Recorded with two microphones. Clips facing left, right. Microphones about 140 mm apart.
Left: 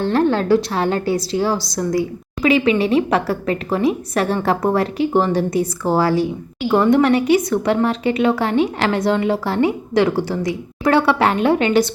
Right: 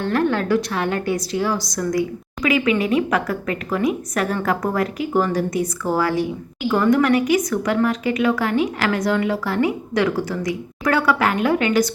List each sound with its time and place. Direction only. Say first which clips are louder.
0.0 s a woman's voice: left 3 dB; 30° left (ahead or behind)